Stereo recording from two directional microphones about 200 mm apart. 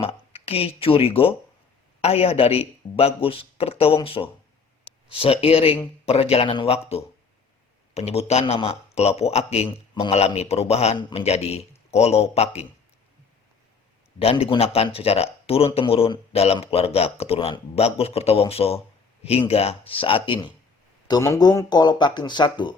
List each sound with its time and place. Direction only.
0.0 s a man's voice: 30° left (ahead or behind)
14.2 s speech: 30° left (ahead or behind)